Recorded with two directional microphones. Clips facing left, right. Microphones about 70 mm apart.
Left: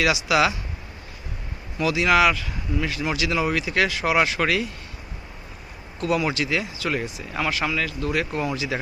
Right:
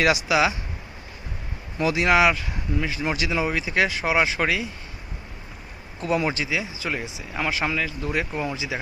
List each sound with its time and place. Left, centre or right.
0.3 s speech: right
1.8 s speech: right
2.1 s speech: right
6.0 s speech: right
6.4 s speech: centre